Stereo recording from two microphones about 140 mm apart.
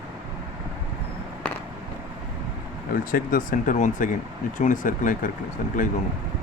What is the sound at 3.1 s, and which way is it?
Speech, 80° left.